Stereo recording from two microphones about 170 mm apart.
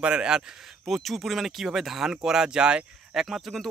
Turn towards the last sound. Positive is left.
turn(degrees=0)  # may be behind; listen again after turning